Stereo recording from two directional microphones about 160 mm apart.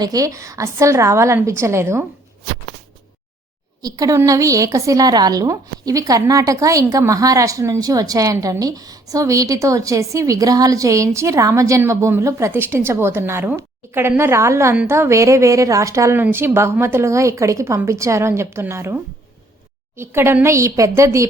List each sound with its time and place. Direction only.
0.0 s a woman's voice: 20° right (ahead or behind)
3.8 s a woman's voice: 25° right (ahead or behind)
20.0 s a woman's voice: 15° right (ahead or behind)